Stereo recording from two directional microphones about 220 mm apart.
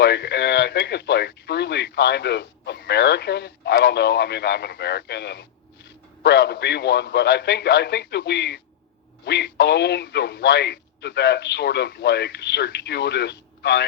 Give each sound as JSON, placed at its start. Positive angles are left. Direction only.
{"t": 0.0, "sound": "speech", "side_deg": 50}